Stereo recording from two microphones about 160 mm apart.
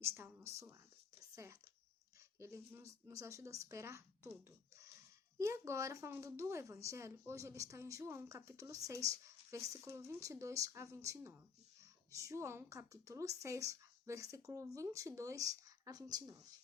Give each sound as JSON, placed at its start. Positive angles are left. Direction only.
{"t": 0.0, "sound": "speech", "side_deg": -15}
{"t": 2.4, "sound": "speech", "side_deg": -20}
{"t": 5.4, "sound": "speech", "side_deg": -15}